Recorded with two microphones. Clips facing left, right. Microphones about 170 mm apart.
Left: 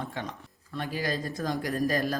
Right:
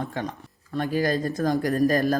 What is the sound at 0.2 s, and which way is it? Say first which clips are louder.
Speech: right 6 dB; 45° right (ahead or behind).